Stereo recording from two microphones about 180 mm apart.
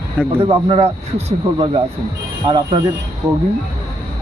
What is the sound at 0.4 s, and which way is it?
Speech, 30° right (ahead or behind).